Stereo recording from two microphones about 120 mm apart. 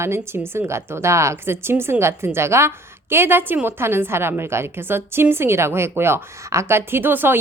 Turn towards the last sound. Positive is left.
turn(degrees=-15)  # may be behind; listen again after turning